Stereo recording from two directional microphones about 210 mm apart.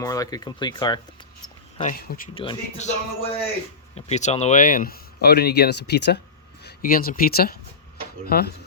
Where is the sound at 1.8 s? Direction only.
45° left (ahead or behind).